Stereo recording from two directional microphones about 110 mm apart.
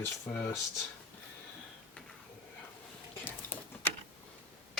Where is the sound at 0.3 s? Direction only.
15° left (ahead or behind).